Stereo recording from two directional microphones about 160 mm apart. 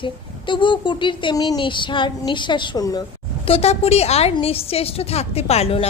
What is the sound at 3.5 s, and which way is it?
A woman's voice, 40° left (ahead or behind).